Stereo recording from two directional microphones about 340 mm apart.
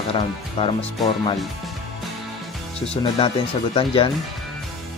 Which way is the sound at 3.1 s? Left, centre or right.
Centre.